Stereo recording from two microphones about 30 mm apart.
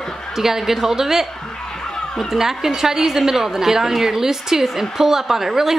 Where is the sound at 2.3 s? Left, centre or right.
Centre.